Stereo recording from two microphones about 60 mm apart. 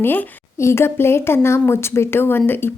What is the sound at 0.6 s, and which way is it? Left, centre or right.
A woman's voice, left.